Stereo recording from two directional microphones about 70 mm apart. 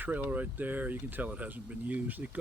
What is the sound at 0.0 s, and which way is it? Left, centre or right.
Speech, right.